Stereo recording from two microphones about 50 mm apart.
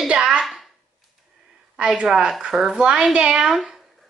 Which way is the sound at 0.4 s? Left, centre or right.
Centre.